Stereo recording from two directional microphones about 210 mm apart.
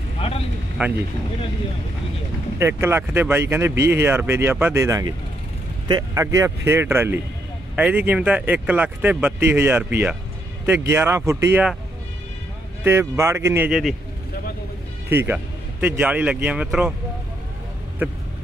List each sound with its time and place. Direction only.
0.8 s speech: 10° right (ahead or behind)
2.6 s speech: 10° right (ahead or behind)
12.8 s speech: 10° right (ahead or behind)
15.0 s speech: 10° right (ahead or behind)
18.0 s speech: 10° right (ahead or behind)